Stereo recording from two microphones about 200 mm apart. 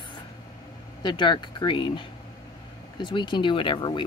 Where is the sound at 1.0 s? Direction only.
20° left (ahead or behind).